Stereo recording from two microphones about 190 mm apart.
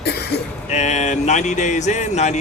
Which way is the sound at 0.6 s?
40° left (ahead or behind).